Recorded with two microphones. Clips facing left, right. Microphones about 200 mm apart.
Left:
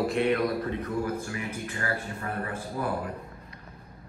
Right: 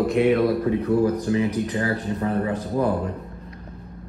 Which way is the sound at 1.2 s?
20° right (ahead or behind).